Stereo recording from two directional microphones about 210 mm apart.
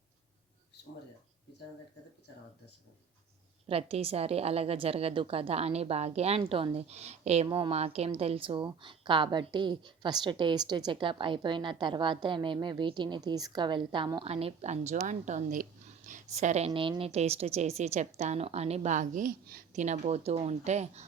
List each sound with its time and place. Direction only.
3.7 s a woman's voice: 30° right (ahead or behind)